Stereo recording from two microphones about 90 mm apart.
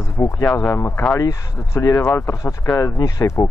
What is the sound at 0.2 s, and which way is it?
Speech, 35° left (ahead or behind).